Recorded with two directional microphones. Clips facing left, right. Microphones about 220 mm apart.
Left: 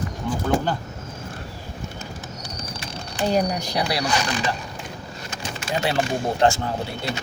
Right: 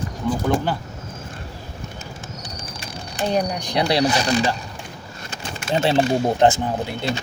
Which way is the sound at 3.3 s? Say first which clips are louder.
Even; 5° left (ahead or behind).